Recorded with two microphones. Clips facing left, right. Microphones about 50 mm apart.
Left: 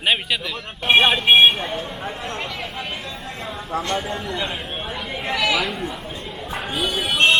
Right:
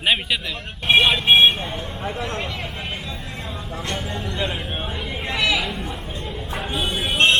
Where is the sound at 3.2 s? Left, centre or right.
Centre.